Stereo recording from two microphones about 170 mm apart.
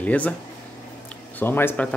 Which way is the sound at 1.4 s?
10° left (ahead or behind).